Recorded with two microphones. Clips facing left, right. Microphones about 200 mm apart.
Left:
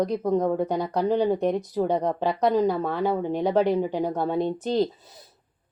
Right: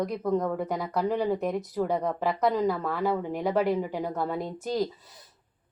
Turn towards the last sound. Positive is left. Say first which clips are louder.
# left 6 dB
turn(degrees=25)  # may be behind; listen again after turning